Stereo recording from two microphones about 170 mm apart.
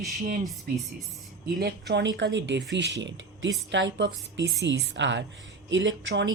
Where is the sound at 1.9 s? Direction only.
90° right.